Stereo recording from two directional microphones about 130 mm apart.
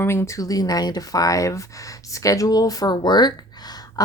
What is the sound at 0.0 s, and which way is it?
Speech, 20° left (ahead or behind).